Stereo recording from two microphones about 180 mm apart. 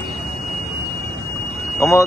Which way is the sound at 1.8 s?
15° left (ahead or behind).